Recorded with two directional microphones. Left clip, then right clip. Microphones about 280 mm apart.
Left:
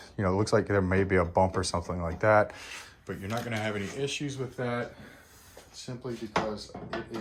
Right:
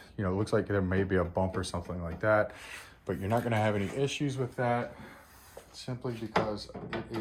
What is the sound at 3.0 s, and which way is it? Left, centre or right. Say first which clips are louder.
Speech: right 4 dB; centre.